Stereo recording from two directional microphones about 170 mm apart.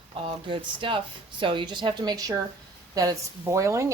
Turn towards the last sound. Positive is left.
turn(degrees=-15)  # may be behind; listen again after turning